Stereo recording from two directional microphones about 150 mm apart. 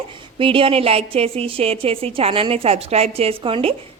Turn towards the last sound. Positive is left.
turn(degrees=-40)  # may be behind; listen again after turning